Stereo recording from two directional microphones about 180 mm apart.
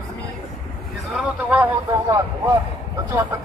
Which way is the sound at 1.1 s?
10° right (ahead or behind).